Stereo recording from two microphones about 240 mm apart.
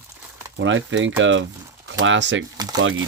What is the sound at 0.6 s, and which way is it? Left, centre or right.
Speech, right.